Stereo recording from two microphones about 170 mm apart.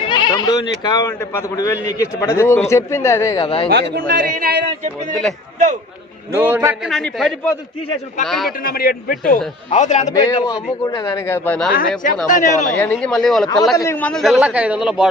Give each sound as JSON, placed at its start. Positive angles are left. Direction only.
{"t": 0.1, "sound": "speech", "side_deg": 25}
{"t": 3.7, "sound": "speech", "side_deg": -65}
{"t": 6.3, "sound": "a man's voice", "side_deg": -10}
{"t": 6.9, "sound": "a man's voice", "side_deg": 0}
{"t": 8.6, "sound": "a man's voice", "side_deg": 60}
{"t": 9.6, "sound": "a man's voice", "side_deg": 45}
{"t": 10.1, "sound": "speech", "side_deg": 20}
{"t": 11.7, "sound": "a man's voice", "side_deg": 55}
{"t": 12.7, "sound": "a man's voice", "side_deg": 10}
{"t": 13.7, "sound": "a man's voice", "side_deg": 15}